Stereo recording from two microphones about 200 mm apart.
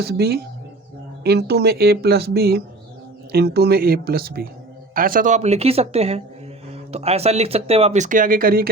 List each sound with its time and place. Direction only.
0.0 s speech: 50° right (ahead or behind)